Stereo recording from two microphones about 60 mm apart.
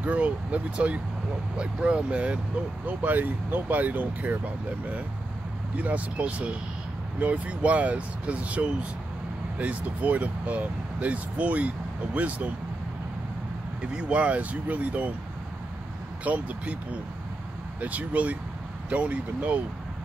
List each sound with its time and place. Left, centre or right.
0.0 s speech: right
5.8 s speech: right
13.9 s speech: centre
16.3 s speech: right